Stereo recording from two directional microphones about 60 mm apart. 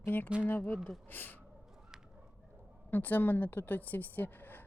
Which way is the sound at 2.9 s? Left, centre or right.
Left.